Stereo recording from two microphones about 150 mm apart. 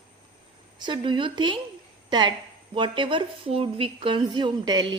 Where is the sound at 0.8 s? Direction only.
30° right (ahead or behind).